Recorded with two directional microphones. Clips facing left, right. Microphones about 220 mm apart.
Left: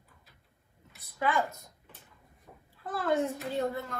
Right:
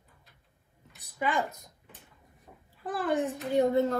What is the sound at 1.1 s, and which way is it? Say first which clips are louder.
Speech: even; 15° right (ahead or behind).